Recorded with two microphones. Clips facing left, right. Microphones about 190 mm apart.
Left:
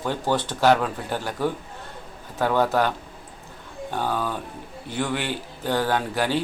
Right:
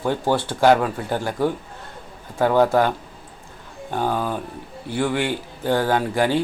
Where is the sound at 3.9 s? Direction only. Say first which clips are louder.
Right 3 dB; 15° right (ahead or behind).